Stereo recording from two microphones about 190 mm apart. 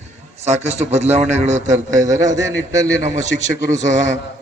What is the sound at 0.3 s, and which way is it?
A man's voice, 35° right (ahead or behind).